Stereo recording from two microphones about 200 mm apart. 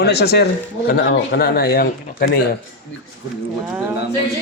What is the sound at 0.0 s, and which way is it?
Speech, 55° left (ahead or behind).